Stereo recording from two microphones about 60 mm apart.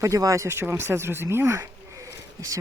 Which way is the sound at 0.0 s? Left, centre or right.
Right.